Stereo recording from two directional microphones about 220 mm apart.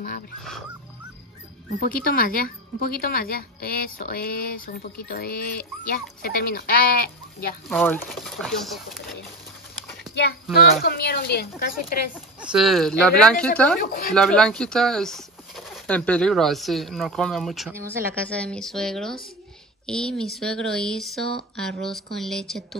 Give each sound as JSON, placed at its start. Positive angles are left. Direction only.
{"t": 1.8, "sound": "speech", "side_deg": 40}
{"t": 7.6, "sound": "speech", "side_deg": 5}
{"t": 10.5, "sound": "speech", "side_deg": 45}
{"t": 12.4, "sound": "speech", "side_deg": -5}
{"t": 13.7, "sound": "speech", "side_deg": 40}
{"t": 14.1, "sound": "speech", "side_deg": 5}